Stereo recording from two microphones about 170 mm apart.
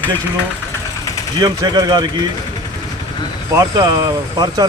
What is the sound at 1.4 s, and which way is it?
Speech, 25° right (ahead or behind).